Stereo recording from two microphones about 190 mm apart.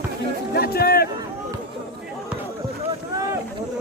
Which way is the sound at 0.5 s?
55° left (ahead or behind).